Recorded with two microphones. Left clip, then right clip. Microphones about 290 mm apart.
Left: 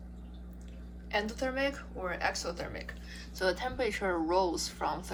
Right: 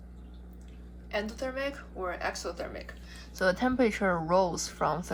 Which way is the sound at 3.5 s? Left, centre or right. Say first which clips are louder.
Right 8 dB; right.